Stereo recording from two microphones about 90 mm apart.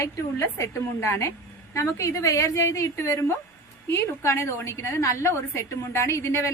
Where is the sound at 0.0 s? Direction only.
30° left (ahead or behind).